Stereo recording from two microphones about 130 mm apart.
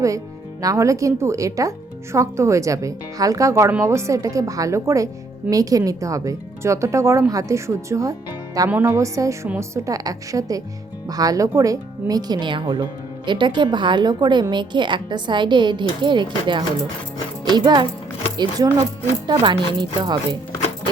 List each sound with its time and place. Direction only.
0.6 s speech: 25° right (ahead or behind)